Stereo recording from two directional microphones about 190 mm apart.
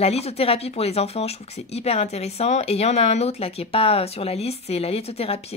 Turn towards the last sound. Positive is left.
turn(degrees=30)  # may be behind; listen again after turning